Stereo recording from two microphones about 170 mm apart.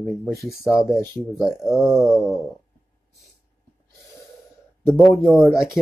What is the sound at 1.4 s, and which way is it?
Speech, centre (ahead or behind).